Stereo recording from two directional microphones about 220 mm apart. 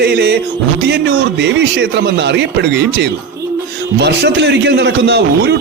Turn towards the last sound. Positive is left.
turn(degrees=-50)  # may be behind; listen again after turning